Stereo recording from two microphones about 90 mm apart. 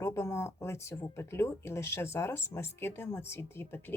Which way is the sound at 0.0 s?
30° left (ahead or behind).